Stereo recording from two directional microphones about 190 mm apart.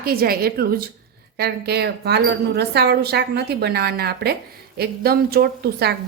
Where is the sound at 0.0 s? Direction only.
50° right (ahead or behind).